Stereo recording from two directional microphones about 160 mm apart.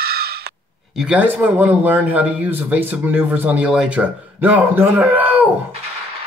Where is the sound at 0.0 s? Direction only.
80° right.